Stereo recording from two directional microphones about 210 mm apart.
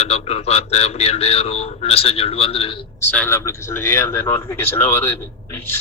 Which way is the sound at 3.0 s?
10° left (ahead or behind).